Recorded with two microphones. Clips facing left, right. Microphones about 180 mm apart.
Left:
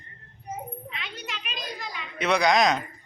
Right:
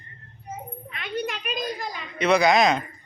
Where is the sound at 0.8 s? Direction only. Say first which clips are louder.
Right 9 dB; 50° right (ahead or behind).